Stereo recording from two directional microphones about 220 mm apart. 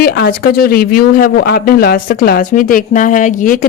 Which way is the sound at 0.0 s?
45° left (ahead or behind).